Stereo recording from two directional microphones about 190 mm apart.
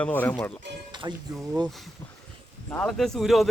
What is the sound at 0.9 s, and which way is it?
Music, 25° right (ahead or behind).